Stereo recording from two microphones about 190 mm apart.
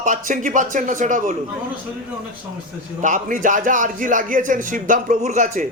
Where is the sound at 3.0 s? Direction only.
40° right (ahead or behind).